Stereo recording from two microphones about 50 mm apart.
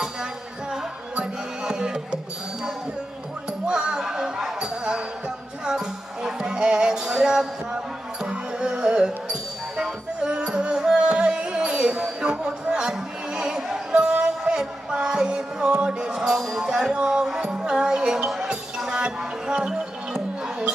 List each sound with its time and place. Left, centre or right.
1.2 s music: centre
3.7 s a sound: centre
4.6 s basketball bounce: centre
5.6 s music: centre
12.9 s a sound: centre
15.8 s music: centre